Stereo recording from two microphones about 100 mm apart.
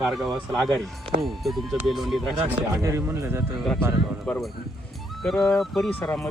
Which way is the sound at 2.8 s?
30° right (ahead or behind).